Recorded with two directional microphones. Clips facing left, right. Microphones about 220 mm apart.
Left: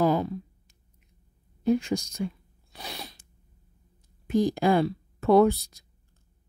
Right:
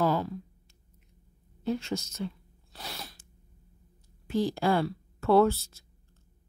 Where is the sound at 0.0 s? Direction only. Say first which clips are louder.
Left 4 dB; 15° left (ahead or behind).